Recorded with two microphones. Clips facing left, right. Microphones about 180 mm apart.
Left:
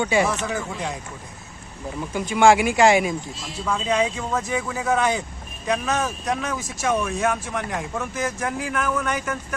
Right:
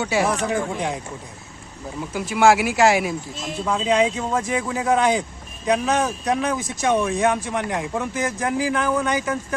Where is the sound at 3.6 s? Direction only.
20° right (ahead or behind).